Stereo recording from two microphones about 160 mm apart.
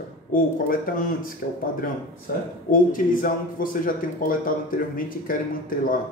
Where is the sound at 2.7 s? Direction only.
60° left (ahead or behind).